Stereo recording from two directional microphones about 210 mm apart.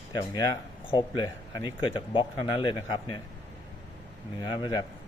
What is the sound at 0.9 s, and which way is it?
Speech, 20° left (ahead or behind).